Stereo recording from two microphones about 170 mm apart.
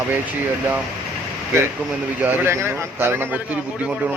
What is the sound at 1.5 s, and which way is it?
A man's voice, 15° right (ahead or behind).